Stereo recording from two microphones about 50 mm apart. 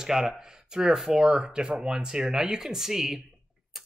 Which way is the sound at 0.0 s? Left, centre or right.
Centre.